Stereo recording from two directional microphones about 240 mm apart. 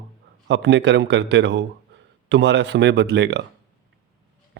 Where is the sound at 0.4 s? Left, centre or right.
Right.